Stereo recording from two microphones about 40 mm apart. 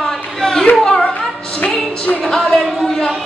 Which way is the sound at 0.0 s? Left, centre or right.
Centre.